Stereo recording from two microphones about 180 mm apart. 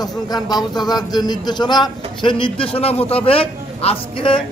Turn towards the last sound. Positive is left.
turn(degrees=30)  # may be behind; listen again after turning